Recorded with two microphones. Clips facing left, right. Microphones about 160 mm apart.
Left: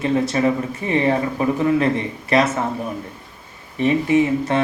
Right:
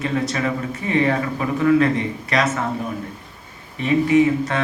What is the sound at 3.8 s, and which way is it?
Speech, 25° left (ahead or behind).